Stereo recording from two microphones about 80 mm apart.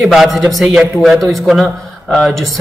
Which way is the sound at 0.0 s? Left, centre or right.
Centre.